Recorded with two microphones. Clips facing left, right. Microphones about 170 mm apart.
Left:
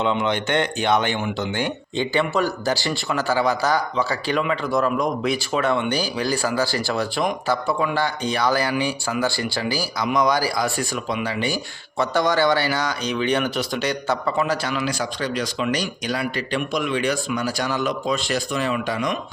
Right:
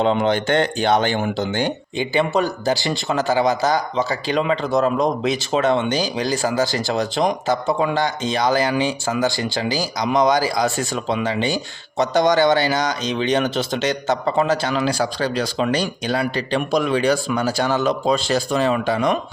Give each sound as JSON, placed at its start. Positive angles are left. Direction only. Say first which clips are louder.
{"t": 0.0, "sound": "speech", "louder": "right 4 dB", "side_deg": -35}
{"t": 2.0, "sound": "speech", "louder": "right 2 dB", "side_deg": -20}